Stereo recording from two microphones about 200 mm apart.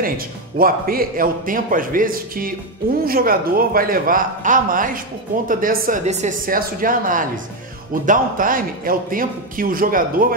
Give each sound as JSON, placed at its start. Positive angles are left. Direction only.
{"t": 0.0, "sound": "speech", "side_deg": -45}